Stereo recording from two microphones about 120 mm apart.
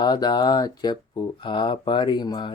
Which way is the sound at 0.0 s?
35° left (ahead or behind).